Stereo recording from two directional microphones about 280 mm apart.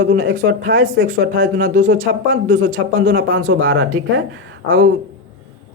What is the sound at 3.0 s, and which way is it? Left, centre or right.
Speech, right.